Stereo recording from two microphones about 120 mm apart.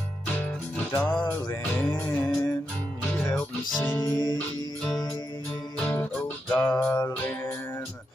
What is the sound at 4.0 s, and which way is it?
Music, 35° left (ahead or behind).